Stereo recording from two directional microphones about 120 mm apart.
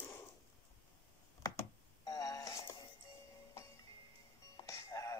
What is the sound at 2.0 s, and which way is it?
Music, 30° left (ahead or behind).